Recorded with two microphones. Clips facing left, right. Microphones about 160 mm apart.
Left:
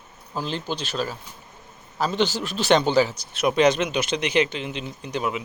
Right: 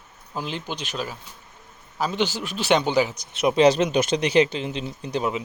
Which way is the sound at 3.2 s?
25° right (ahead or behind).